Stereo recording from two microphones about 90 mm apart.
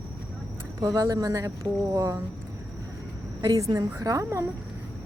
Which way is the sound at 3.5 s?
40° right (ahead or behind).